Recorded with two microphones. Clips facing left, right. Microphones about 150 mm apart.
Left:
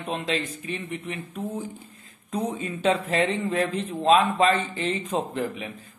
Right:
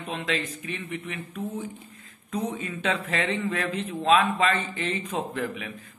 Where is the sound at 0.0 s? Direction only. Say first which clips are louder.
Left 2 dB; 30° left (ahead or behind).